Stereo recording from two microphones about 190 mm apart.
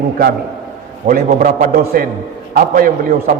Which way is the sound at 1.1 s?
40° right (ahead or behind).